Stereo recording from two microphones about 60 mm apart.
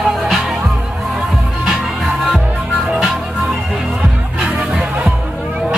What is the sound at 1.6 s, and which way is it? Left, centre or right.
Music, centre.